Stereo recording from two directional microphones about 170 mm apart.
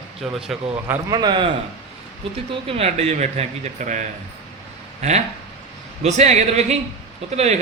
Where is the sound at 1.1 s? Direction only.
25° right (ahead or behind).